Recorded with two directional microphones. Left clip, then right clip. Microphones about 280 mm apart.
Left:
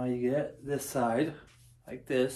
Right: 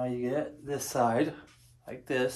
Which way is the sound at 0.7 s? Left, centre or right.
Centre.